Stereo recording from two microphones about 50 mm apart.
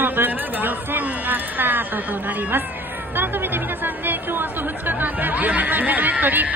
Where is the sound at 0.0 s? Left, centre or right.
Right.